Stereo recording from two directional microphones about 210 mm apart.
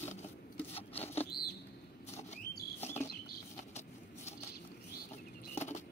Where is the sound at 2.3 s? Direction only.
30° left (ahead or behind).